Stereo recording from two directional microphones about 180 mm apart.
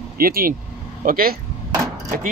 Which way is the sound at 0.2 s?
55° right (ahead or behind).